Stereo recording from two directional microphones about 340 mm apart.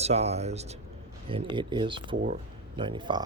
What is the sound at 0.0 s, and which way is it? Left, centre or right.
Speech, centre.